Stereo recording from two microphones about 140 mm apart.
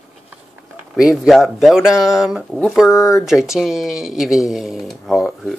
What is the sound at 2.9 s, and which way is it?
Speech, 20° left (ahead or behind).